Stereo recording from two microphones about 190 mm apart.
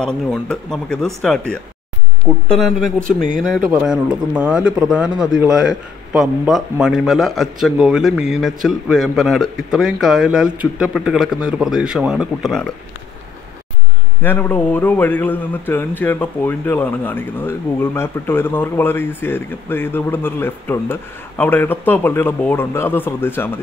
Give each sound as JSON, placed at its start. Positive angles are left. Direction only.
{"t": 0.0, "sound": "speech", "side_deg": 5}
{"t": 14.2, "sound": "a man's voice", "side_deg": 10}